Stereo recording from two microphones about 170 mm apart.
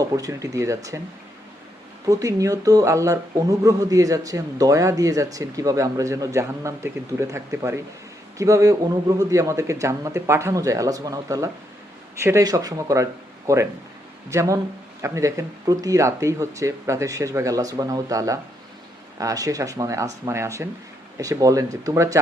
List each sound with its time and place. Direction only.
0.0 s speech: 20° right (ahead or behind)
2.0 s speech: 20° right (ahead or behind)